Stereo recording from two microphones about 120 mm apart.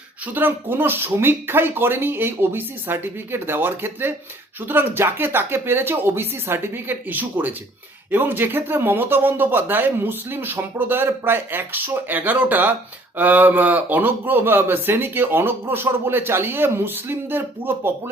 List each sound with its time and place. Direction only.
0.3 s a man's voice: 15° right (ahead or behind)